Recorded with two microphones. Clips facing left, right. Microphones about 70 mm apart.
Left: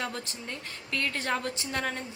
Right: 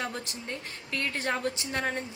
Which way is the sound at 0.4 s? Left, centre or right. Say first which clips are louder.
Right 1 dB; right.